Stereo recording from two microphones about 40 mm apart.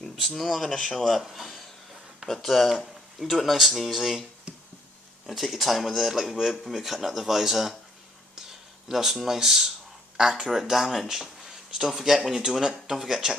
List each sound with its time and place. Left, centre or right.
0.3 s speech: centre
0.7 s speech: left
0.9 s speech: centre
1.2 s a sound: centre
3.2 s speech: centre
8.4 s a sound: centre
10.2 s speech: centre